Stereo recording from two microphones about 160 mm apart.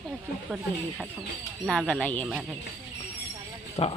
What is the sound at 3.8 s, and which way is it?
Speech, 40° left (ahead or behind).